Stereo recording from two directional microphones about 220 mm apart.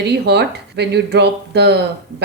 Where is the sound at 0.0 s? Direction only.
50° right (ahead or behind).